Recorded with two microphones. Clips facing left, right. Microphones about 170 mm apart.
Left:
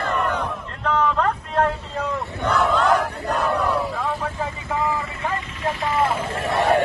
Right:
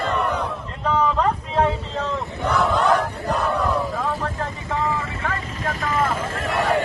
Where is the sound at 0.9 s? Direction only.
5° right (ahead or behind).